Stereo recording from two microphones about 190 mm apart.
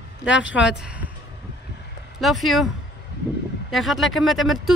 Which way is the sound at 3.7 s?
Centre (ahead or behind).